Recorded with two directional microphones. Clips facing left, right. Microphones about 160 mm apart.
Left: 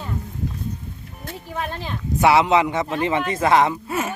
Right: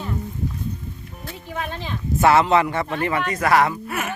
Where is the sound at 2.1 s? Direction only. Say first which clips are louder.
Even; 15° left (ahead or behind).